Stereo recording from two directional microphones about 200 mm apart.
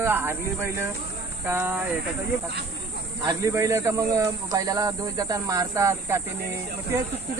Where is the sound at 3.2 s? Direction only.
15° right (ahead or behind).